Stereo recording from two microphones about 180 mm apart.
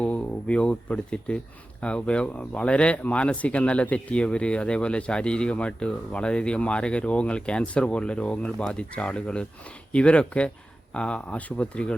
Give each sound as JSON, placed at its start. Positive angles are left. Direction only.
{"t": 0.0, "sound": "speech", "side_deg": 5}